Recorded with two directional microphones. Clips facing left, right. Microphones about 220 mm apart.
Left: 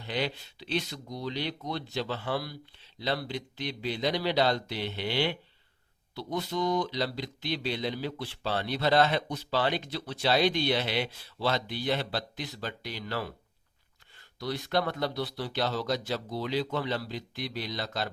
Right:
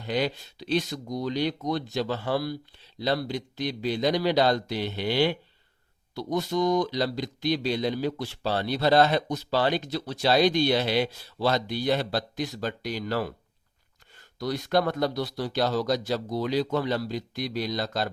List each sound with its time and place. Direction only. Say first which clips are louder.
0.0 s speech: right 5 dB; 45° right (ahead or behind)